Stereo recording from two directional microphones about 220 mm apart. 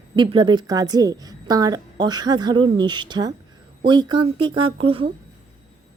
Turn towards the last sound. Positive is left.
turn(degrees=-25)  # may be behind; listen again after turning